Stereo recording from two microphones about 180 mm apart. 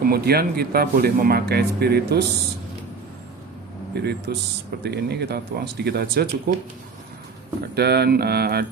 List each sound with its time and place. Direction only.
0.0 s speech: 60° right (ahead or behind)
3.9 s speech: 65° right (ahead or behind)
7.8 s speech: 65° right (ahead or behind)